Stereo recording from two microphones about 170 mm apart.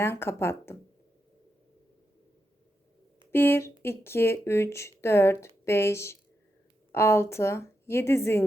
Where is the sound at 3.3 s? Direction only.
15° left (ahead or behind).